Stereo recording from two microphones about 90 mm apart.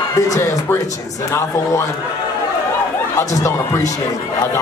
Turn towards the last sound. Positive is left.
turn(degrees=35)  # may be behind; listen again after turning